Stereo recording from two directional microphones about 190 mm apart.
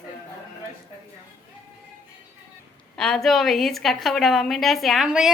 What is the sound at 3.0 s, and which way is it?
A woman's voice, 5° left (ahead or behind).